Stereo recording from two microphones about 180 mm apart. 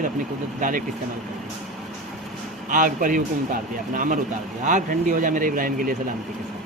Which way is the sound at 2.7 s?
50° right (ahead or behind).